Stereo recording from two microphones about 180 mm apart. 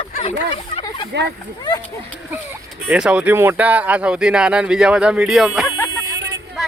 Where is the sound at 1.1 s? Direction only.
70° right (ahead or behind).